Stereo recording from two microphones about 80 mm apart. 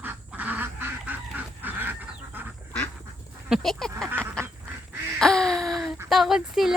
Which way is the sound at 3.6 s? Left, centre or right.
Centre.